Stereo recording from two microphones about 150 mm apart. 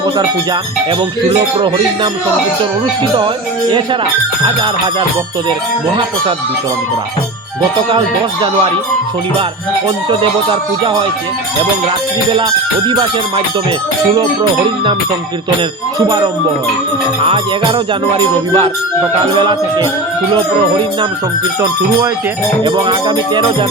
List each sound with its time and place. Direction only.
7.9 s music: 35° right (ahead or behind)
10.1 s music: 35° right (ahead or behind)
12.9 s music: 30° right (ahead or behind)
16.0 s music: 25° right (ahead or behind)
17.2 s music: 35° right (ahead or behind)
22.6 s music: 30° right (ahead or behind)